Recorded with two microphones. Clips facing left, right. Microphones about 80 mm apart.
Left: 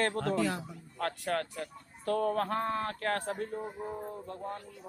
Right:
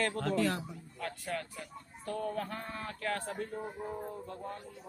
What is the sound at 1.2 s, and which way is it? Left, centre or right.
Speech, left.